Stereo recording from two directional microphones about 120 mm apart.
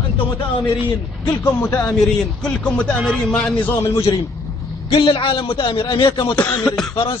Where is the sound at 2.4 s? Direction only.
10° left (ahead or behind).